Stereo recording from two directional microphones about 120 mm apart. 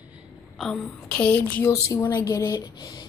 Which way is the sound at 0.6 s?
5° left (ahead or behind).